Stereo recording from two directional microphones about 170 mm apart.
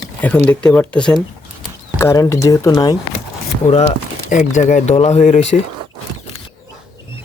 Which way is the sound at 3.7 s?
40° left (ahead or behind).